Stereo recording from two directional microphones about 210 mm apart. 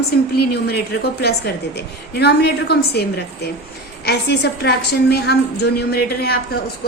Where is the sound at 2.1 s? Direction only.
50° left (ahead or behind).